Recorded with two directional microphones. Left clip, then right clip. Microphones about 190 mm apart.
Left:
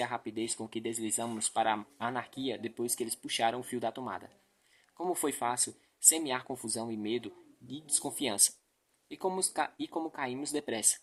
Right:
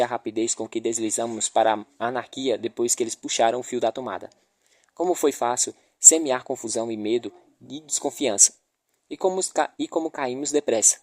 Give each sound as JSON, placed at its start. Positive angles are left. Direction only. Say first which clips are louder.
{"t": 0.0, "sound": "speech", "louder": "right 11 dB", "side_deg": -45}